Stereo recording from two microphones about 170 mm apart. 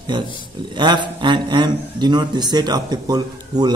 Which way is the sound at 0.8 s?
25° right (ahead or behind).